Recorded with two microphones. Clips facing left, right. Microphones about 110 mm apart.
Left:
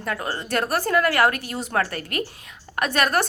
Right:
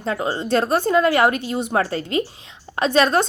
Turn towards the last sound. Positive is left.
turn(degrees=-25)  # may be behind; listen again after turning